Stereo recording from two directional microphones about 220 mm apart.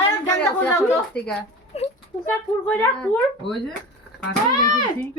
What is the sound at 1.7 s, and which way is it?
Speech, 30° left (ahead or behind).